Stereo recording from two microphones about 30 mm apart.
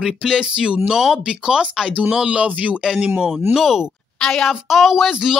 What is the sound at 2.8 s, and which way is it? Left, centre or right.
A man's voice, right.